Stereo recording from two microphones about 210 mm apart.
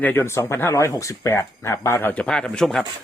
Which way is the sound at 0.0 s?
10° left (ahead or behind).